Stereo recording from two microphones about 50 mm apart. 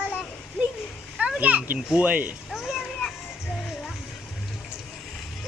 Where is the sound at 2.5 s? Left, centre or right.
Centre.